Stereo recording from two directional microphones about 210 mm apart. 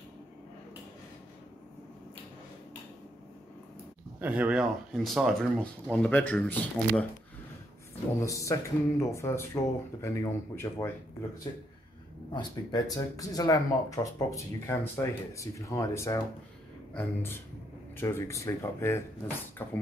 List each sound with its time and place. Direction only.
4.2 s speech: 5° right (ahead or behind)
8.2 s speech: 15° left (ahead or behind)
12.3 s speech: 20° left (ahead or behind)